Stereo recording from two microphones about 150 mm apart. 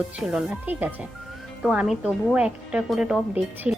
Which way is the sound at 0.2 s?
Centre (ahead or behind).